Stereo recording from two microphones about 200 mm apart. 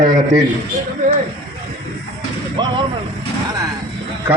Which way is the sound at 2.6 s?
25° right (ahead or behind).